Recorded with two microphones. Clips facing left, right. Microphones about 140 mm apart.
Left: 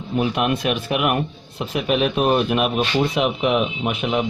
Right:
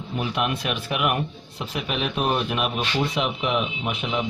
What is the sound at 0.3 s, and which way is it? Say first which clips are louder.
Speech: left 5 dB; 45° left (ahead or behind).